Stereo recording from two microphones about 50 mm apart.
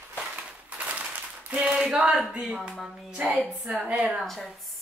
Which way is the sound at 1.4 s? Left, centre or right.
Right.